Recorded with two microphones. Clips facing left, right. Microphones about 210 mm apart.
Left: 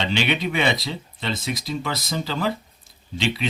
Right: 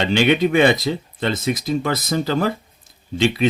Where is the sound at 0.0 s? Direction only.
50° right (ahead or behind).